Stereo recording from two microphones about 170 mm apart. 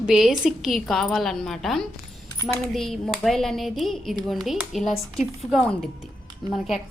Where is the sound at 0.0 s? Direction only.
5° right (ahead or behind).